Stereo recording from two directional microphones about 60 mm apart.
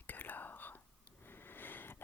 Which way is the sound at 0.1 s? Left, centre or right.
Left.